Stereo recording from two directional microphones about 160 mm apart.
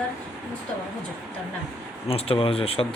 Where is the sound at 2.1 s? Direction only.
35° left (ahead or behind).